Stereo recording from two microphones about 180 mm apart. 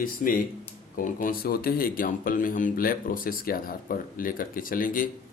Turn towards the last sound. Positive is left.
turn(degrees=50)  # may be behind; listen again after turning